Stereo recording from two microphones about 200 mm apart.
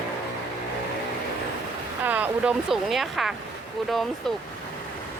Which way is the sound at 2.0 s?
10° right (ahead or behind).